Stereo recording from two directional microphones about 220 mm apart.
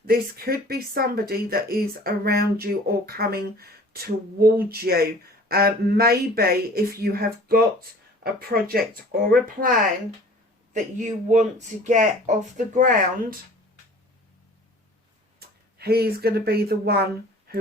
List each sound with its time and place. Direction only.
0.0 s speech: 45° right (ahead or behind)
10.9 s speech: 35° right (ahead or behind)
15.4 s speech: 45° right (ahead or behind)